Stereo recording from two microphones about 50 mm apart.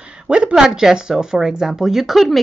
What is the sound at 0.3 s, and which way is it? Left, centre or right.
Speech, right.